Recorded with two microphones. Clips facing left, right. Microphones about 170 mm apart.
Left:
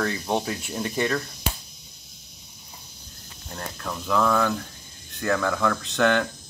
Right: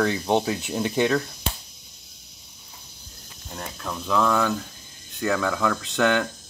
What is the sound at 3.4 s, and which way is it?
Speech, centre (ahead or behind).